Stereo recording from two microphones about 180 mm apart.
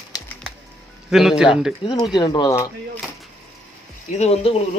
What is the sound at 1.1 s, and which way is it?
Speech, 5° right (ahead or behind).